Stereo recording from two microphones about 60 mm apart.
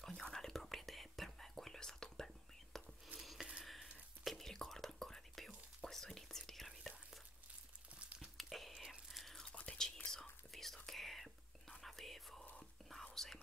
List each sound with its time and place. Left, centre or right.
0.0 s whispering: centre
3.2 s a sound: centre
4.2 s whispering: centre
8.0 s a sound: right
8.4 s whispering: centre
9.5 s whispering: centre